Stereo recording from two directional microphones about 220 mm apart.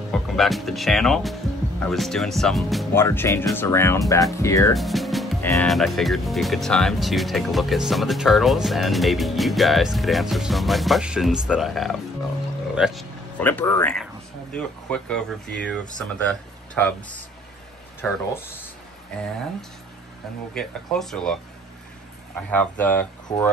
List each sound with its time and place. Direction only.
0.1 s speech: centre (ahead or behind)
2.9 s speech: 10° left (ahead or behind)
4.7 s speech: centre (ahead or behind)
13.4 s speech: 10° left (ahead or behind)
18.0 s speech: 10° left (ahead or behind)
20.5 s speech: centre (ahead or behind)
22.5 s speech: 5° left (ahead or behind)